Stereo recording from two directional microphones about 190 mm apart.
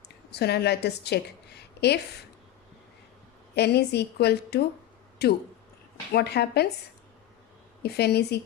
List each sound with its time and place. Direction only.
0.3 s a woman's voice: 60° left (ahead or behind)
3.5 s a woman's voice: 60° left (ahead or behind)
7.8 s a woman's voice: 60° left (ahead or behind)